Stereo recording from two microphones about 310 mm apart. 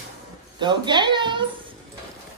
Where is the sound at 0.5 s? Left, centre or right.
Centre.